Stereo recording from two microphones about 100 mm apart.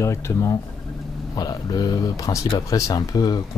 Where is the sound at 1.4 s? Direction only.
40° left (ahead or behind).